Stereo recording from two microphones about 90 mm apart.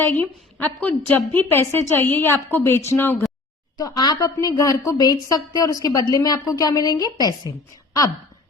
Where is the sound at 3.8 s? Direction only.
50° left (ahead or behind).